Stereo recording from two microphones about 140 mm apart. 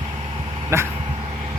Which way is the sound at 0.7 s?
20° right (ahead or behind).